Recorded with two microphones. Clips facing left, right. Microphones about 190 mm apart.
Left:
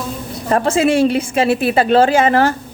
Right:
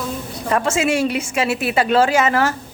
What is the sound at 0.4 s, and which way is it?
A woman's voice, 35° left (ahead or behind).